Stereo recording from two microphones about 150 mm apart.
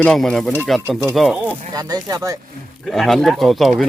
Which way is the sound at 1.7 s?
25° right (ahead or behind).